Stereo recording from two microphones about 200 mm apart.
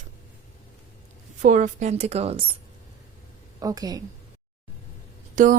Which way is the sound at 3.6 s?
20° right (ahead or behind).